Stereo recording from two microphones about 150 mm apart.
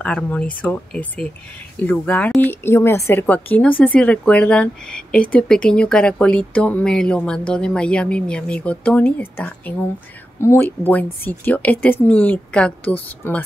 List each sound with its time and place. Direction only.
0.0 s speech: 5° left (ahead or behind)